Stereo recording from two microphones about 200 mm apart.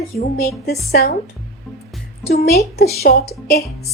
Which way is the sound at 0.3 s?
50° left (ahead or behind).